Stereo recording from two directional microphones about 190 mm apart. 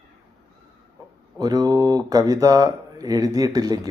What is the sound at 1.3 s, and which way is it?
Speech, 20° right (ahead or behind).